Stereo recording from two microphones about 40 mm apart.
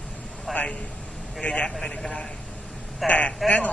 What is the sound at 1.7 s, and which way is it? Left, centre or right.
A man's voice, centre.